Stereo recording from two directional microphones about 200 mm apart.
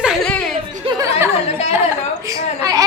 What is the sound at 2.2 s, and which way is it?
Speech, 15° right (ahead or behind).